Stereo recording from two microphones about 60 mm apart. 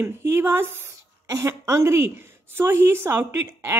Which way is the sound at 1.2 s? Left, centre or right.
Right.